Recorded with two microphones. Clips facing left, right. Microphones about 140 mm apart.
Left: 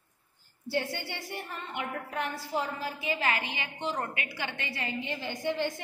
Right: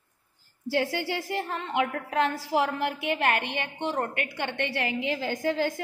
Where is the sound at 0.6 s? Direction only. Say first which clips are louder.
Right 5 dB; 90° right.